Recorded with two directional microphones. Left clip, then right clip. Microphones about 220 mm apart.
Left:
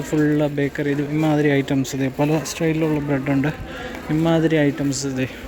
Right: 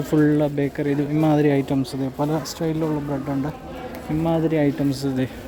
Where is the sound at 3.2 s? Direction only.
25° left (ahead or behind).